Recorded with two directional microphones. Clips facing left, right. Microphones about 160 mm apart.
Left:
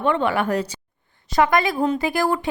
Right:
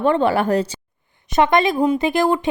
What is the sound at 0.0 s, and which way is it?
A woman's voice, 35° right (ahead or behind).